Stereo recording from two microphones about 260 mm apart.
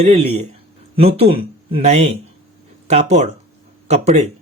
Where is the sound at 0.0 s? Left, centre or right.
Right.